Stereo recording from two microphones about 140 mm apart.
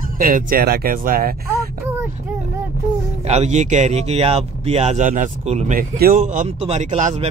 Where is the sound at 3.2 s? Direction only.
50° right (ahead or behind).